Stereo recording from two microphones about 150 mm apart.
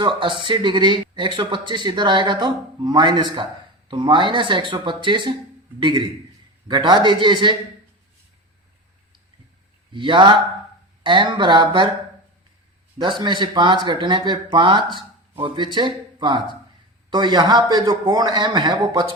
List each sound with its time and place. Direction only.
0.0 s speech: 35° right (ahead or behind)
9.9 s speech: 30° right (ahead or behind)
13.0 s a man's voice: 30° right (ahead or behind)